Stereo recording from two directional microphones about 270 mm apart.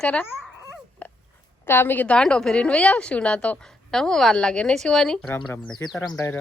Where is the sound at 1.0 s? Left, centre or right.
Centre.